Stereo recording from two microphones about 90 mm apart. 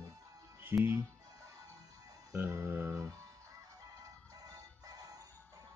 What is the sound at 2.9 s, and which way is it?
Music, 45° right (ahead or behind).